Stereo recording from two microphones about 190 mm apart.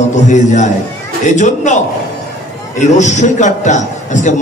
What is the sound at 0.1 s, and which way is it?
A man's voice, 40° left (ahead or behind).